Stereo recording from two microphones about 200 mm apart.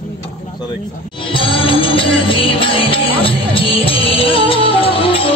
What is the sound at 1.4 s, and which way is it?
Music, 25° left (ahead or behind).